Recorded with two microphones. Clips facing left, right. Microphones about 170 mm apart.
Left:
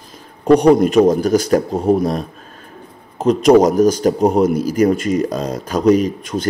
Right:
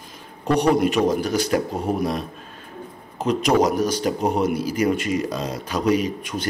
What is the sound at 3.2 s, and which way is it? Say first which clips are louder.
A man's voice: left 8 dB; 40° left (ahead or behind).